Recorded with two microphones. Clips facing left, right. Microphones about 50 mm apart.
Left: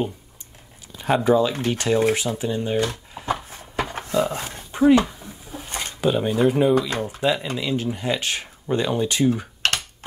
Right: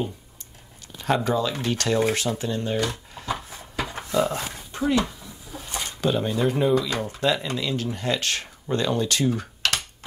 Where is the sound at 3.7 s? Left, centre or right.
Left.